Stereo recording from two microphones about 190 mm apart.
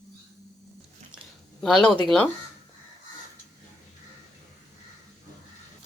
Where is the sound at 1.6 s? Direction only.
5° left (ahead or behind).